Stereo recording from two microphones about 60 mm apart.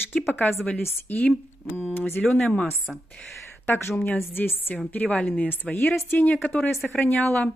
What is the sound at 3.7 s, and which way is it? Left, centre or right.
A woman's voice, left.